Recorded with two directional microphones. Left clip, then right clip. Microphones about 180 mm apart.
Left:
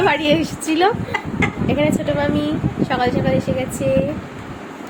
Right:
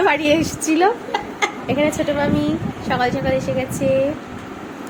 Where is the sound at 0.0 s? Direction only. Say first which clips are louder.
Even; 10° right (ahead or behind).